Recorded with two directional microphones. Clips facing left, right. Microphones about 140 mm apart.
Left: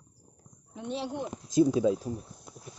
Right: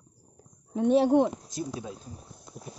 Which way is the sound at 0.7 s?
55° right (ahead or behind).